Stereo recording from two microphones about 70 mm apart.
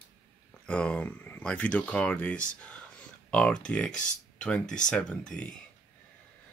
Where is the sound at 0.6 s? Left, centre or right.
Centre.